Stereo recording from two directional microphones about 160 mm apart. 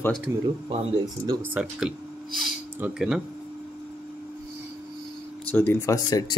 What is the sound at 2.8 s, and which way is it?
Speech, 10° right (ahead or behind).